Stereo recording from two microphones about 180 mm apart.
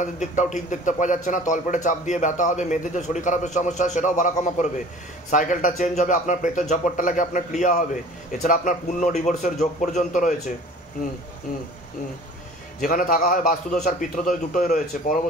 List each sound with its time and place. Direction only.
0.0 s a man's voice: 40° left (ahead or behind)
12.8 s a man's voice: 50° left (ahead or behind)